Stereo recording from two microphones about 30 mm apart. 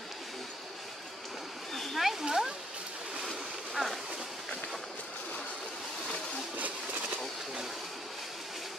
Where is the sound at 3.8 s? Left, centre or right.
Centre.